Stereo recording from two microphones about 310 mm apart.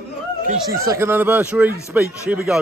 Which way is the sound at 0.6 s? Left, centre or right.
Centre.